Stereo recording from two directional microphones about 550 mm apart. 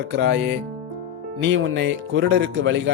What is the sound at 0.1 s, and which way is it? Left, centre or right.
Speech, centre.